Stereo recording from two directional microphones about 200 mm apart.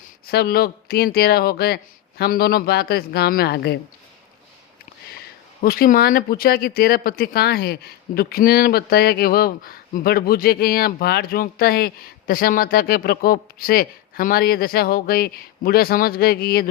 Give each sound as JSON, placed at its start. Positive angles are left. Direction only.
{"t": 0.3, "sound": "speech", "side_deg": 50}
{"t": 5.1, "sound": "speech", "side_deg": 50}